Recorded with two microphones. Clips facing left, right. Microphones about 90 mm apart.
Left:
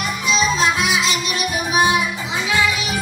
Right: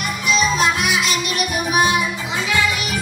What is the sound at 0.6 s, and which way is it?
Music, 20° left (ahead or behind).